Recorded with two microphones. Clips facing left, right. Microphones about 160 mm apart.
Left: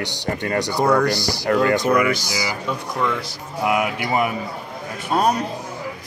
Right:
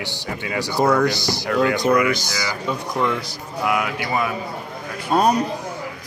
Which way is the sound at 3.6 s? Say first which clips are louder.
Left 2 dB; 20° left (ahead or behind).